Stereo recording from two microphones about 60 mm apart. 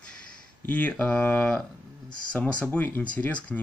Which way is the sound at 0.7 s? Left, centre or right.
Left.